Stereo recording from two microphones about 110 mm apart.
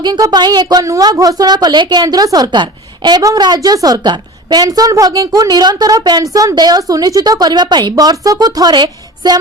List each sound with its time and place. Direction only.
0.0 s a woman's voice: 40° right (ahead or behind)